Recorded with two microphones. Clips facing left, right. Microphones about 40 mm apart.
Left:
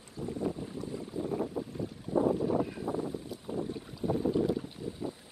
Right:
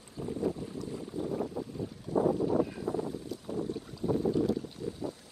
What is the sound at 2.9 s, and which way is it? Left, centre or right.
Boat, centre.